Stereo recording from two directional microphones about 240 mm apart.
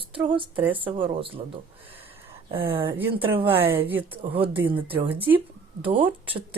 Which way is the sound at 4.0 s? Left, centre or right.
Right.